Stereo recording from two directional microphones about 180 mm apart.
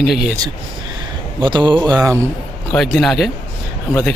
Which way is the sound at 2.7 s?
Centre (ahead or behind).